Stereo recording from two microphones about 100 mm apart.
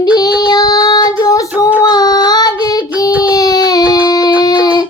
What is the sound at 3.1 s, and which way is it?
Baby cry, 15° right (ahead or behind).